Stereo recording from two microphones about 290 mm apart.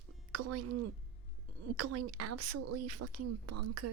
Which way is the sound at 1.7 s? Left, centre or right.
Right.